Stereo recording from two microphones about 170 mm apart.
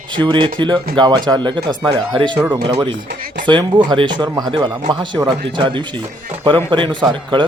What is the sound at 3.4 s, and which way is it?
Speech, 30° right (ahead or behind).